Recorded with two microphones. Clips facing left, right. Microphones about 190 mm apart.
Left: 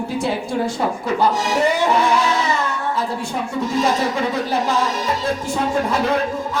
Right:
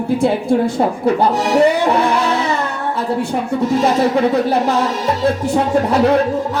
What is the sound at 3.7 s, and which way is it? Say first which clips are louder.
Music: right 4 dB; 60° right (ahead or behind).